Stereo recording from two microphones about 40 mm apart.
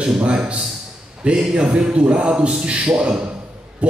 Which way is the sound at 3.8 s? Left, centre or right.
Right.